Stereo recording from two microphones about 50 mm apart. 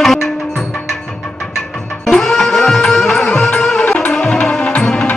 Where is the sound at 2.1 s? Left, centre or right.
Centre.